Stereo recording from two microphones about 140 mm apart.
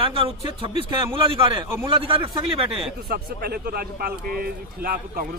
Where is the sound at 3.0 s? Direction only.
90° right.